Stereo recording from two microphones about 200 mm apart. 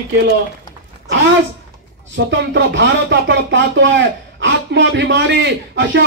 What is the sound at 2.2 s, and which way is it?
Speech, 55° right (ahead or behind).